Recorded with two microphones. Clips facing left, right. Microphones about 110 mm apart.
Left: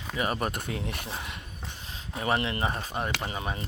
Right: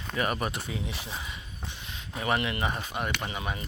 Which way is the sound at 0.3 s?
45° left (ahead or behind).